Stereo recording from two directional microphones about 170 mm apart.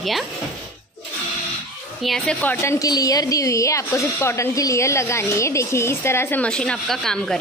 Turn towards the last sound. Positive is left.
turn(degrees=5)  # may be behind; listen again after turning